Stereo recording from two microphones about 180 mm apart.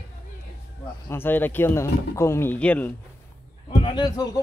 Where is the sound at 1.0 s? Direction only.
10° left (ahead or behind).